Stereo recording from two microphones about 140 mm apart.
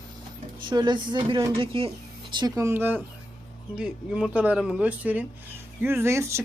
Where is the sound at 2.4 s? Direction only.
20° right (ahead or behind).